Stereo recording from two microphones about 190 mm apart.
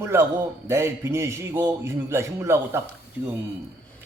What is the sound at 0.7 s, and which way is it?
A man's voice, 15° right (ahead or behind).